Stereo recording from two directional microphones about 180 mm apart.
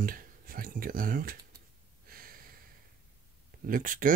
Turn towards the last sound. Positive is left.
turn(degrees=-50)  # may be behind; listen again after turning